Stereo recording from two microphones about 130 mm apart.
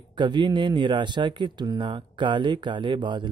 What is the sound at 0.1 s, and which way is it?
Speech, 35° right (ahead or behind).